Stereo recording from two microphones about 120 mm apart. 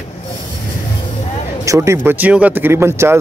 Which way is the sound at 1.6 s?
25° right (ahead or behind).